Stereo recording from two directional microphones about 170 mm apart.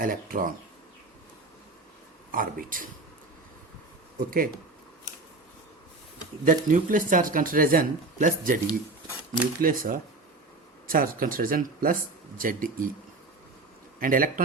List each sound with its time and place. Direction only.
0.0 s speech: 55° right (ahead or behind)
2.3 s speech: 55° right (ahead or behind)
6.4 s speech: 50° right (ahead or behind)
14.0 s speech: 55° right (ahead or behind)